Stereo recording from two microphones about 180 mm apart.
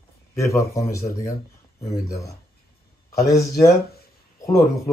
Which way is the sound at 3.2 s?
15° left (ahead or behind).